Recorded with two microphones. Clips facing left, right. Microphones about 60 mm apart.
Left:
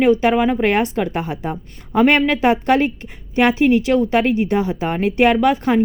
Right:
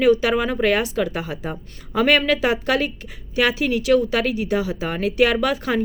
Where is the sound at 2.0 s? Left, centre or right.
Left.